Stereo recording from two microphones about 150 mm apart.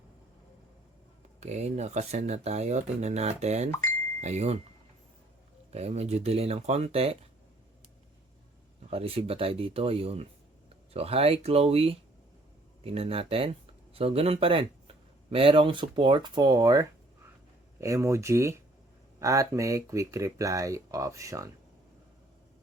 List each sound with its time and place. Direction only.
1.4 s speech: 50° right (ahead or behind)
3.7 s speech: 20° left (ahead or behind)
4.2 s speech: 50° right (ahead or behind)
5.7 s speech: 45° right (ahead or behind)
8.9 s speech: 40° right (ahead or behind); by 21.5 s 20° right (ahead or behind)